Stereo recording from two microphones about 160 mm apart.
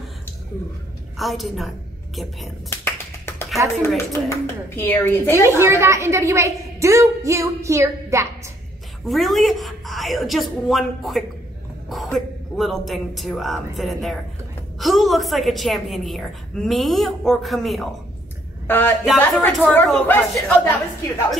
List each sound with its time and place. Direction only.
1.1 s a woman's voice: centre (ahead or behind)
2.7 s tap: 15° left (ahead or behind)
3.9 s speech: 15° left (ahead or behind)
5.4 s a woman's voice: 15° right (ahead or behind)
9.0 s a woman's voice: centre (ahead or behind)
18.7 s a woman's voice: 10° left (ahead or behind)